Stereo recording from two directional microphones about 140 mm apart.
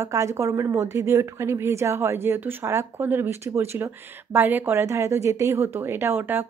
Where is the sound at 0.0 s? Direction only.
20° right (ahead or behind).